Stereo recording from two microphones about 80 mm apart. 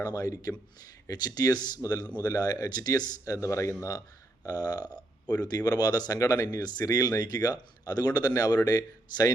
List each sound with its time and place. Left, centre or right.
0.0 s speech: left
4.4 s speech: left